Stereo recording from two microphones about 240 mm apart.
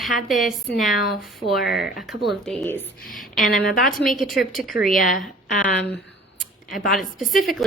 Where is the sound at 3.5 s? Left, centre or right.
Left.